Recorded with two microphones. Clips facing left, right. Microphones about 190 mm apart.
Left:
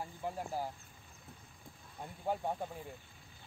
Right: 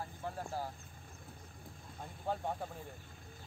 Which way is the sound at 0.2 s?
15° left (ahead or behind).